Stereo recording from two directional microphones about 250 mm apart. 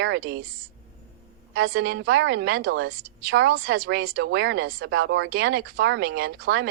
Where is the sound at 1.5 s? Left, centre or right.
Right.